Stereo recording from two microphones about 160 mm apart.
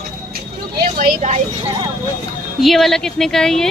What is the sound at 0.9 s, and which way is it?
Speech, 50° right (ahead or behind).